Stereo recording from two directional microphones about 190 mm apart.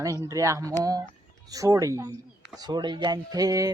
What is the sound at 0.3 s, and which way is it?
Speech, 15° right (ahead or behind).